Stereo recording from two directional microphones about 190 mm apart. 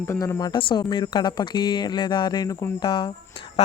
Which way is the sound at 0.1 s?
15° left (ahead or behind).